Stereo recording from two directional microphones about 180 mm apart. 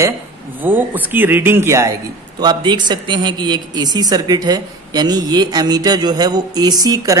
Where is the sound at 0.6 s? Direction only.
10° right (ahead or behind).